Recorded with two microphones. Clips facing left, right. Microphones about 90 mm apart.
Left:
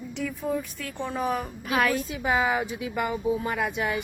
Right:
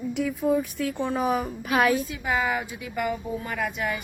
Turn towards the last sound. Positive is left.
turn(degrees=20)  # may be behind; listen again after turning